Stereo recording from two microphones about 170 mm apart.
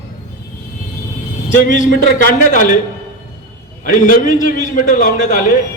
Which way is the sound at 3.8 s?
50° left (ahead or behind).